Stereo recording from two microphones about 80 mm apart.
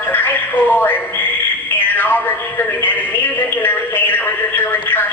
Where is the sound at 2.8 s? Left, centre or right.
Left.